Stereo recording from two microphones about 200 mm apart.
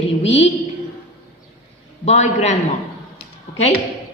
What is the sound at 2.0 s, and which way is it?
Speech, 35° left (ahead or behind).